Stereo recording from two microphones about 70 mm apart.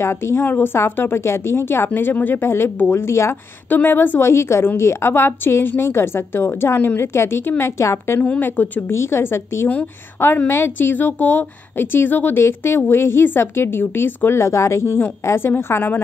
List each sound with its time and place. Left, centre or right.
0.0 s a woman's voice: left
3.6 s a woman's voice: left
8.2 s speech: left
8.9 s a woman's voice: left
9.7 s a woman's voice: left